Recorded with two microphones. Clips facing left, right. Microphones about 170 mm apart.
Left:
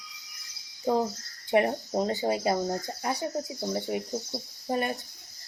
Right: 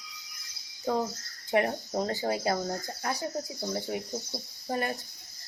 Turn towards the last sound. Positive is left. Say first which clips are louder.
# left 2 dB
turn(degrees=20)  # may be behind; listen again after turning